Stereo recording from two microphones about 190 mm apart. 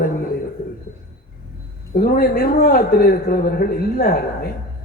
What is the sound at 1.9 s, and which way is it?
A man's voice, 50° left (ahead or behind).